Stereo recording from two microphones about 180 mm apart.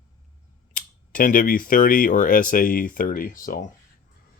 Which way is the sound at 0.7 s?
50° left (ahead or behind).